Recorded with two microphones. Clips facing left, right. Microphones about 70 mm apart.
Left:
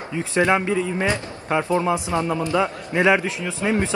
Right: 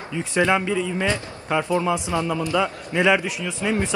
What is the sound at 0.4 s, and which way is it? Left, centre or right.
A man's voice, left.